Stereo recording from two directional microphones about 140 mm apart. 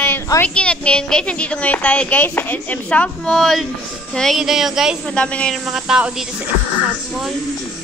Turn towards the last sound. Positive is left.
turn(degrees=-5)  # may be behind; listen again after turning